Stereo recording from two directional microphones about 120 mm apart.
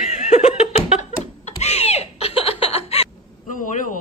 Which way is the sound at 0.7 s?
65° left (ahead or behind).